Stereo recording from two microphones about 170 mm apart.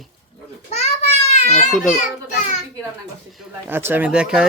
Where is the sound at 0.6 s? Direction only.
40° left (ahead or behind).